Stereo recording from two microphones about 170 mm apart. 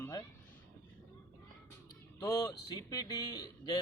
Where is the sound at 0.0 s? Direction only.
20° left (ahead or behind).